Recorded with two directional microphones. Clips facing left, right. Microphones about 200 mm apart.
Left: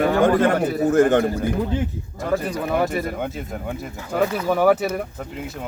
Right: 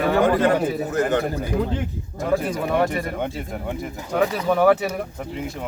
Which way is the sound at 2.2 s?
Centre (ahead or behind).